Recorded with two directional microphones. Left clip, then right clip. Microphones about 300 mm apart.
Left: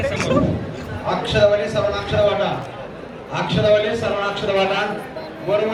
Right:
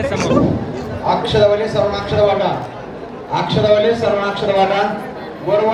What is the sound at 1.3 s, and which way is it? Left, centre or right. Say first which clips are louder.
Speech: right 1 dB; right.